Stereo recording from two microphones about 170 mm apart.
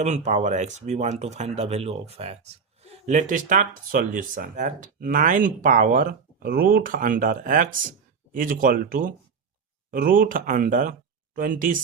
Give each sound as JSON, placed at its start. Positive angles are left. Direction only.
{"t": 0.0, "sound": "speech", "side_deg": -45}
{"t": 3.1, "sound": "speech", "side_deg": -50}